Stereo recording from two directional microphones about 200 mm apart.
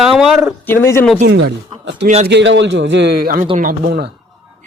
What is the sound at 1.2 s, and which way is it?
A man's voice, 55° right (ahead or behind).